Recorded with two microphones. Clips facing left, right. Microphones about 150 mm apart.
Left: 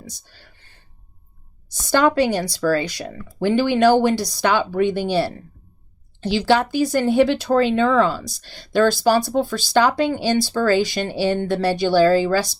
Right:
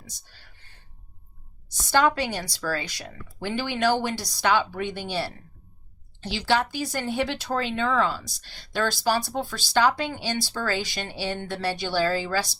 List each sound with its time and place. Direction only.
1.9 s speech: 50° left (ahead or behind)
6.4 s speech: 50° left (ahead or behind)